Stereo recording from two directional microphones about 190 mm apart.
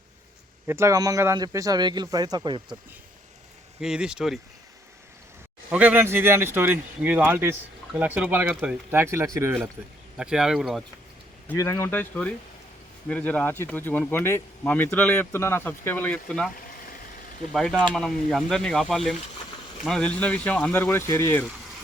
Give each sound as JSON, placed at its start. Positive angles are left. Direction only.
{"t": 0.7, "sound": "speech", "side_deg": -15}
{"t": 3.8, "sound": "speech", "side_deg": -5}
{"t": 5.7, "sound": "speech", "side_deg": -10}
{"t": 10.2, "sound": "speech", "side_deg": -5}
{"t": 11.4, "sound": "speech", "side_deg": 15}
{"t": 17.5, "sound": "speech", "side_deg": 5}